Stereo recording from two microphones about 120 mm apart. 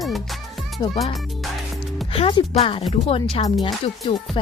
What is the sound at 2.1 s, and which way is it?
Music, 50° left (ahead or behind).